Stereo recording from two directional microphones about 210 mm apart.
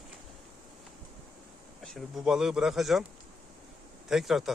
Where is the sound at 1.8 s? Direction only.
Centre (ahead or behind).